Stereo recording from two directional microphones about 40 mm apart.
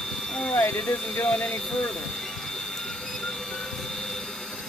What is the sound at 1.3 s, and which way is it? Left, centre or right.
Speech, left.